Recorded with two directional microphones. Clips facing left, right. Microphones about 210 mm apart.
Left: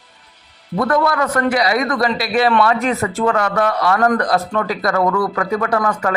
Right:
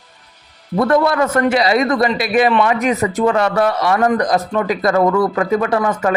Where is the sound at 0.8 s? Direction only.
25° right (ahead or behind).